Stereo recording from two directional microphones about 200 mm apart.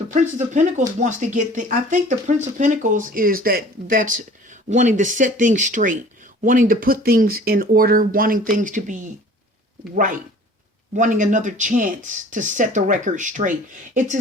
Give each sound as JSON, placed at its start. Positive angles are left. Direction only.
{"t": 0.1, "sound": "speech", "side_deg": -35}